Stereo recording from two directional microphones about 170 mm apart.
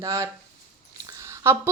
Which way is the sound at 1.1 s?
15° right (ahead or behind).